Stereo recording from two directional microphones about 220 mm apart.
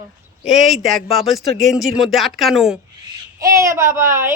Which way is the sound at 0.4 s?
Centre (ahead or behind).